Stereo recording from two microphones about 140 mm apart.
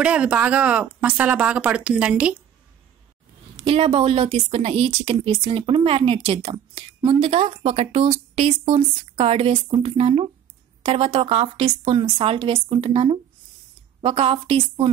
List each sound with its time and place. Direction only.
0.0 s speech: 10° right (ahead or behind)
3.5 s a woman's voice: 45° right (ahead or behind)